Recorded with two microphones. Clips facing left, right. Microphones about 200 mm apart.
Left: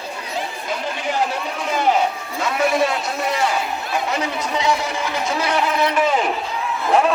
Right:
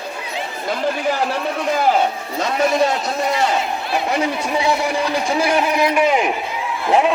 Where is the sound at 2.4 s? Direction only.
40° right (ahead or behind).